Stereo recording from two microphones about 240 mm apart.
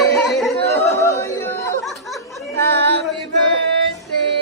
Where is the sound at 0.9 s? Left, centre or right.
Centre.